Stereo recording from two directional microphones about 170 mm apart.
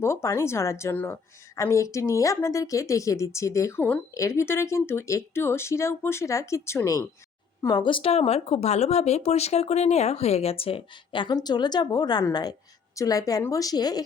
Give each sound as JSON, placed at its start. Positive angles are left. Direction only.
{"t": 0.0, "sound": "a woman's voice", "side_deg": 15}